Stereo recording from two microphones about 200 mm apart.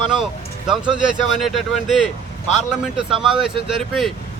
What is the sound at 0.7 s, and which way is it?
Speech, 5° right (ahead or behind).